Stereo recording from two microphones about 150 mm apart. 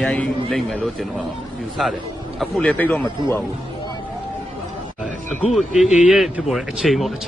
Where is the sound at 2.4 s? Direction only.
Centre (ahead or behind).